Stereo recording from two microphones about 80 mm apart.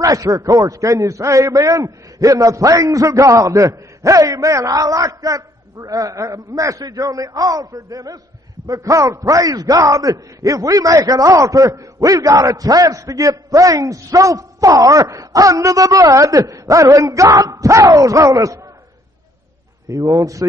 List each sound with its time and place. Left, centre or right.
0.0 s a man's voice: right
19.9 s a man's voice: right